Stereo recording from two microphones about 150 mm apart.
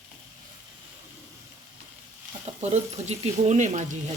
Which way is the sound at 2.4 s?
45° right (ahead or behind).